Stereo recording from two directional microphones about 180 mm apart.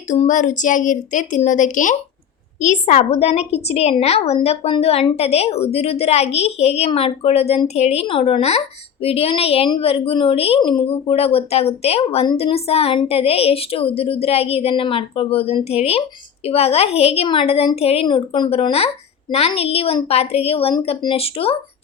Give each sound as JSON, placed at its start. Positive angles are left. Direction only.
{"t": 0.1, "sound": "a woman's voice", "side_deg": 45}